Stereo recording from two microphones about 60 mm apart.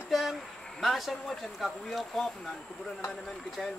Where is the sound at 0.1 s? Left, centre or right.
Centre.